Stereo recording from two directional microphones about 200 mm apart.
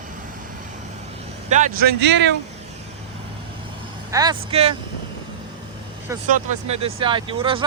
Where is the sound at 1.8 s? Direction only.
60° right (ahead or behind).